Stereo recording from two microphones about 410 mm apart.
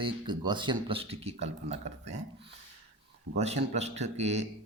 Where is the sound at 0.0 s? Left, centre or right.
Centre.